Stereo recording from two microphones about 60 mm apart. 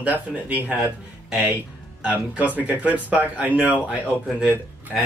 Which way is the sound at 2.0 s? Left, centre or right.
Right.